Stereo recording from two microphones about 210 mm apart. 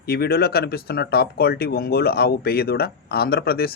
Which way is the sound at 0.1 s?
50° left (ahead or behind).